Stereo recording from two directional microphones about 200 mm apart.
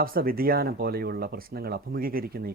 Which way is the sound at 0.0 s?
45° right (ahead or behind).